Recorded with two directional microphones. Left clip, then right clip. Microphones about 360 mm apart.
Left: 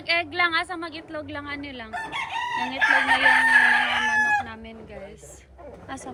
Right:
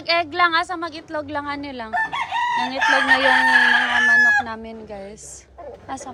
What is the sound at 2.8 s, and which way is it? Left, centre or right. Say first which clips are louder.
Chicken: right 2 dB; right.